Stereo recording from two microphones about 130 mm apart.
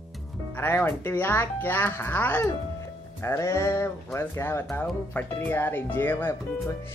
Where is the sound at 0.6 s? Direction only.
15° left (ahead or behind).